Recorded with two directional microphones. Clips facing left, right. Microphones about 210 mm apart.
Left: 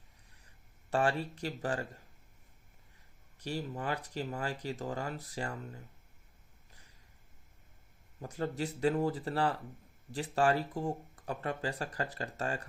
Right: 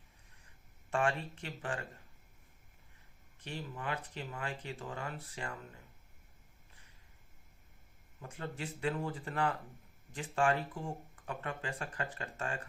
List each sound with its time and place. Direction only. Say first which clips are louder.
0.9 s speech: left 3 dB; 35° left (ahead or behind)
3.3 s speech: left 6 dB; 40° left (ahead or behind)
8.2 s speech: left 7 dB; 35° left (ahead or behind)